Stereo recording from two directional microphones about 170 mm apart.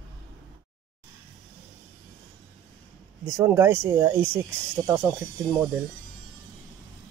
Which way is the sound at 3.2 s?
15° right (ahead or behind).